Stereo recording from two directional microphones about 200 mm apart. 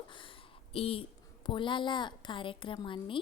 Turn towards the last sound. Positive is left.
turn(degrees=25)  # may be behind; listen again after turning